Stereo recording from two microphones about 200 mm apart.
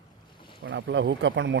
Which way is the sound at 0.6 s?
65° right (ahead or behind).